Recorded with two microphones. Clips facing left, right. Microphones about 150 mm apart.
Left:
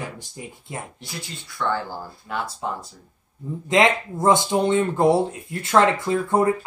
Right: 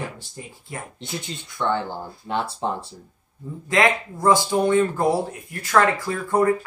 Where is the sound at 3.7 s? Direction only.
20° left (ahead or behind).